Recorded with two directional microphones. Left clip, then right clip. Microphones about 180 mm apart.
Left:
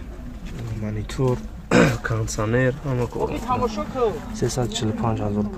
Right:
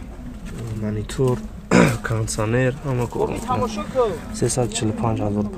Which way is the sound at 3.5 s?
50° right (ahead or behind).